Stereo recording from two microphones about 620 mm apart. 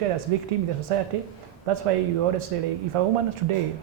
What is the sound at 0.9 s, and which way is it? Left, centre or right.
Speech, right.